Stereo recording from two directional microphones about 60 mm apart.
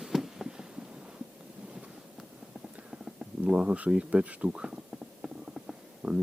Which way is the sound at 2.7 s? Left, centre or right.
Centre.